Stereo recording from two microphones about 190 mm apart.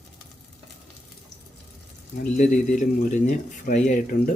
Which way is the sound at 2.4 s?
40° left (ahead or behind).